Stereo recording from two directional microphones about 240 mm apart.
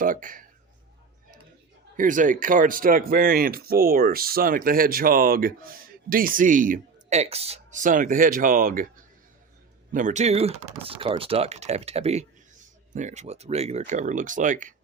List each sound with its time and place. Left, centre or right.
0.0 s speech: right
2.0 s speech: right
9.9 s speech: right